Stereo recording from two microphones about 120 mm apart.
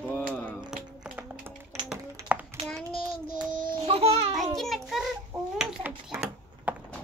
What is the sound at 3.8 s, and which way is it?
Babbling, 55° right (ahead or behind).